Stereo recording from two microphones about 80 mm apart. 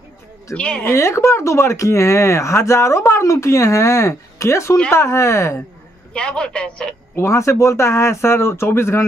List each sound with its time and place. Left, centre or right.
0.6 s a man's voice: centre
0.9 s speech: left
6.1 s a man's voice: centre
7.2 s speech: left